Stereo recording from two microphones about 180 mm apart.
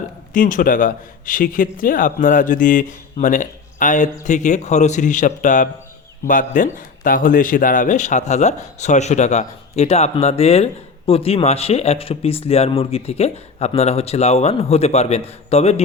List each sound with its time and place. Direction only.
0.3 s a man's voice: 45° left (ahead or behind)